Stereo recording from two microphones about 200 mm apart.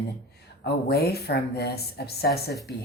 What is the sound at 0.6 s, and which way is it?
Speech, 55° left (ahead or behind).